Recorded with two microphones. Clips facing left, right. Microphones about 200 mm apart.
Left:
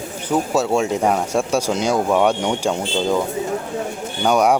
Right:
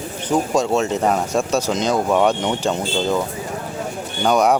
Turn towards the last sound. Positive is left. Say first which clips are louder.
# even
turn(degrees=10)  # may be behind; listen again after turning